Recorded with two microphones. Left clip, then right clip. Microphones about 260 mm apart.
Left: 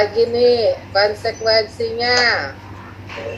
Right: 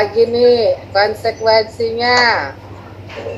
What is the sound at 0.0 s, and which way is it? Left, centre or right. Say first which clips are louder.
A woman's voice: right 3 dB; right.